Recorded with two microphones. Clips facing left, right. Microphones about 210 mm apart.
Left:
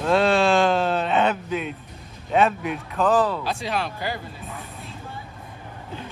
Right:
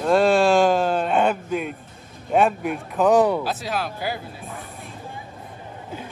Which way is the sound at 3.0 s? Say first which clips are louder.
Right 3 dB; 15° right (ahead or behind).